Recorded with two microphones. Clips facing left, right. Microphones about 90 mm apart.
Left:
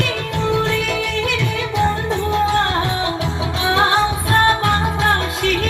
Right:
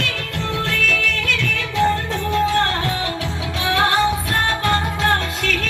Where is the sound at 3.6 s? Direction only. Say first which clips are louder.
Left 1 dB; 20° left (ahead or behind).